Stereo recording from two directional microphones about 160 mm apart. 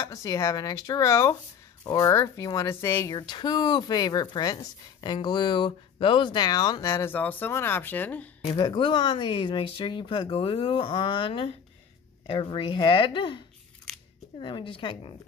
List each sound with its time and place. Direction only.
0.0 s speech: 20° left (ahead or behind)
3.2 s speech: 25° left (ahead or behind); by 8.3 s 10° left (ahead or behind)
8.5 s speech: 30° left (ahead or behind)
14.4 s speech: 30° left (ahead or behind)